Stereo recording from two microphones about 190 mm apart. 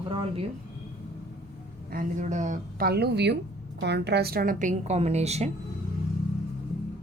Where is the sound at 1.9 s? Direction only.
45° right (ahead or behind).